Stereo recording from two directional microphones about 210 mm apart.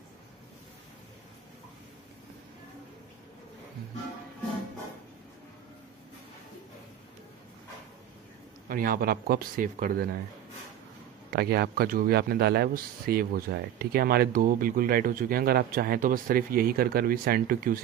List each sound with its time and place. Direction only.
8.6 s speech: 45° right (ahead or behind)
11.2 s speech: 50° right (ahead or behind)